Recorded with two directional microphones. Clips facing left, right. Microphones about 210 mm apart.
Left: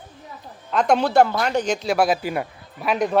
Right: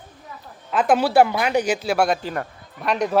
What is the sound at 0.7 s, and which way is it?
Speech, 5° right (ahead or behind).